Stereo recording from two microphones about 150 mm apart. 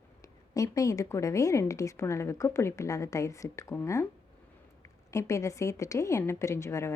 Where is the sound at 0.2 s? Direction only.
25° left (ahead or behind).